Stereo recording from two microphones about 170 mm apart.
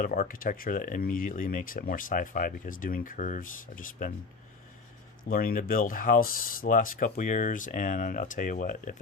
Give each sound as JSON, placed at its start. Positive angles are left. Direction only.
{"t": 0.0, "sound": "speech", "side_deg": 55}
{"t": 5.3, "sound": "speech", "side_deg": 55}